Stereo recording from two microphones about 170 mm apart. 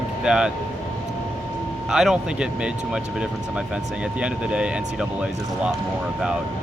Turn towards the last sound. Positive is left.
turn(degrees=-5)  # may be behind; listen again after turning